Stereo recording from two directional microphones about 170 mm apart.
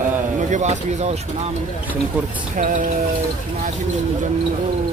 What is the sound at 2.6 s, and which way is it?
Speech, 50° right (ahead or behind).